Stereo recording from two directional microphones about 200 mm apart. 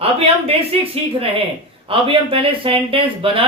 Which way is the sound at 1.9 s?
25° right (ahead or behind).